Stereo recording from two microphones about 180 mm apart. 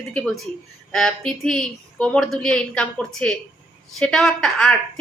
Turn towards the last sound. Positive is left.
turn(degrees=5)  # may be behind; listen again after turning